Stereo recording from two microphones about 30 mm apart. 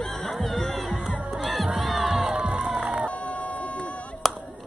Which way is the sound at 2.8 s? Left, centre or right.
Right.